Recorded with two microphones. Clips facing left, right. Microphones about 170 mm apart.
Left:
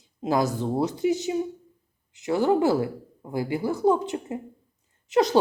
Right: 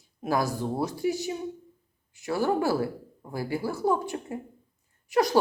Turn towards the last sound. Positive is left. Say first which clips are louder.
# left 3 dB
turn(degrees=20)  # may be behind; listen again after turning